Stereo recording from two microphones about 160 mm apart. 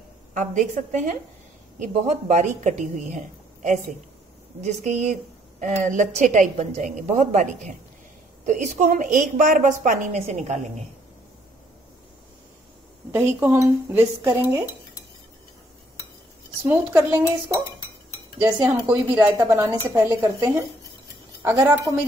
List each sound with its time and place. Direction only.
0.3 s a woman's voice: 50° right (ahead or behind)
13.1 s speech: 15° right (ahead or behind)
16.6 s speech: 10° right (ahead or behind)
18.4 s cutlery: 20° right (ahead or behind)
18.9 s speech: 15° right (ahead or behind)
20.2 s cutlery: 20° right (ahead or behind)